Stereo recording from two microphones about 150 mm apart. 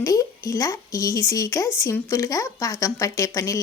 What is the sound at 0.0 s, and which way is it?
A woman's voice, 20° left (ahead or behind).